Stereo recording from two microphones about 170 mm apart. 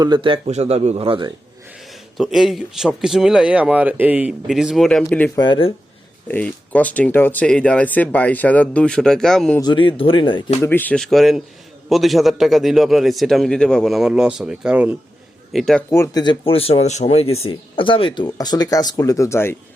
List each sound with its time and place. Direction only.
0.0 s speech: 25° right (ahead or behind)
1.9 s speech: centre (ahead or behind)
5.4 s speech: 30° left (ahead or behind)
6.2 s speech: 10° left (ahead or behind)
9.6 s speech: 25° left (ahead or behind)
10.6 s speech: 10° left (ahead or behind); by 14.9 s 5° right (ahead or behind)
15.5 s speech: 5° left (ahead or behind)
15.9 s speech: 20° left (ahead or behind)